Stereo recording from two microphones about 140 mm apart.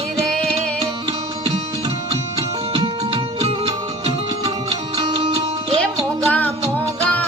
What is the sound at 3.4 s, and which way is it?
Music, 45° right (ahead or behind).